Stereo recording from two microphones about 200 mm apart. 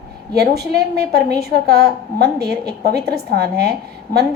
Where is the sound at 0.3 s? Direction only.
55° right (ahead or behind).